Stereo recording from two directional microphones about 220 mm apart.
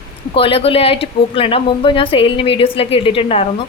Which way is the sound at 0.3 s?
25° left (ahead or behind).